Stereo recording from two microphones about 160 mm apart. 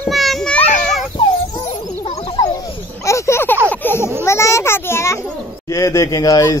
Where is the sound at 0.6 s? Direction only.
50° left (ahead or behind).